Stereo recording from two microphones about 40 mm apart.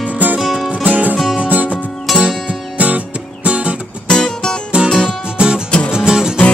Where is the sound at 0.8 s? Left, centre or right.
Right.